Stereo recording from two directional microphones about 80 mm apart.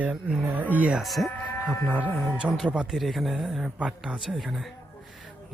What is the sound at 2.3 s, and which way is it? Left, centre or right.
Speech, centre.